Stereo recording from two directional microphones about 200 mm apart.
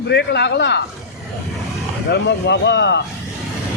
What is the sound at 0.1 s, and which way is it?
Speech, 60° left (ahead or behind).